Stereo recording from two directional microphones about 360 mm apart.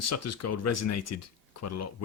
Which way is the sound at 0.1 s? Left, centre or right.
Left.